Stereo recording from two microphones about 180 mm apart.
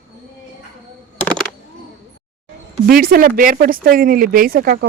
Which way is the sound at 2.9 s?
55° right (ahead or behind).